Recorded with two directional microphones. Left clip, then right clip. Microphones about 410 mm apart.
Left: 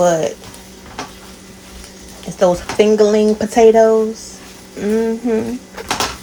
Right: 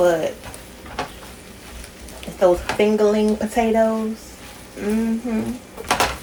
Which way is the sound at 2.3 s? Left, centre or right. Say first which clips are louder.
Left 3 dB; left.